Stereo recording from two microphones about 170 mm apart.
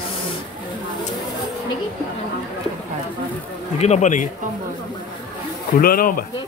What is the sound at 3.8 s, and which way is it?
Speech, 45° left (ahead or behind).